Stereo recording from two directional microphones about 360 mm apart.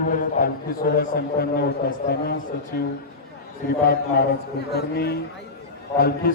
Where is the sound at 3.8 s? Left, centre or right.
Left.